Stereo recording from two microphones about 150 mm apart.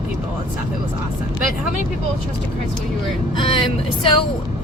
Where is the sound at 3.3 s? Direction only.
35° left (ahead or behind).